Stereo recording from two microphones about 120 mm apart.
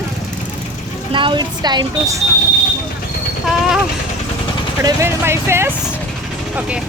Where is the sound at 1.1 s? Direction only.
45° right (ahead or behind).